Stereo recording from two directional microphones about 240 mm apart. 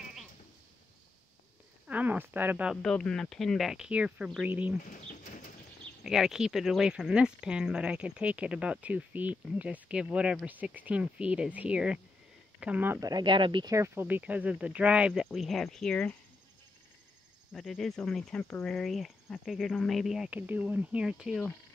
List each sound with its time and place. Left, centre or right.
1.9 s speech: centre
4.9 s bird: left
6.0 s speech: centre
17.5 s speech: centre